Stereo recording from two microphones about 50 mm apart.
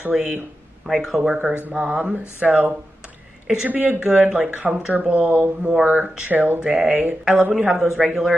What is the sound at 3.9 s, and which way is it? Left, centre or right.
Speech, centre.